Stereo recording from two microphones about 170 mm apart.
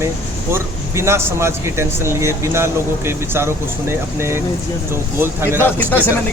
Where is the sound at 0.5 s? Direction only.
15° right (ahead or behind).